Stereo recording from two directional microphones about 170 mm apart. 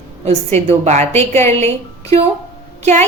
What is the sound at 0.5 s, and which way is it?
A woman's voice, 40° right (ahead or behind).